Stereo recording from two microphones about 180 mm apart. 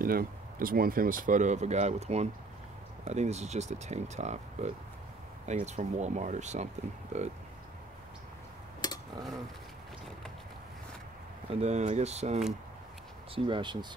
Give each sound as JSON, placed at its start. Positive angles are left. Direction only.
{"t": 0.0, "sound": "speech", "side_deg": -55}
{"t": 11.5, "sound": "speech", "side_deg": -35}
{"t": 13.3, "sound": "speech", "side_deg": -25}